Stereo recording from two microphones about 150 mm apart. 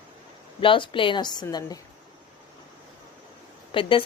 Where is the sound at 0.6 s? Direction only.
35° left (ahead or behind).